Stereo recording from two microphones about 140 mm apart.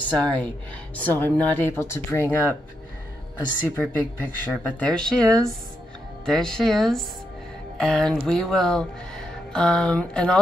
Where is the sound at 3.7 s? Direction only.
10° left (ahead or behind).